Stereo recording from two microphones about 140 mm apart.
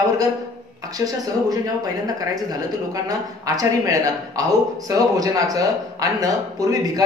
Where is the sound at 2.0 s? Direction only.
25° right (ahead or behind).